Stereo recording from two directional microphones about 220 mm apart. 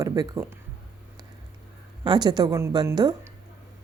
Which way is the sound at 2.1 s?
20° right (ahead or behind).